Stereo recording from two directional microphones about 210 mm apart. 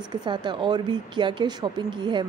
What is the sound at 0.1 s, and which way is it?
A woman's voice, 20° right (ahead or behind).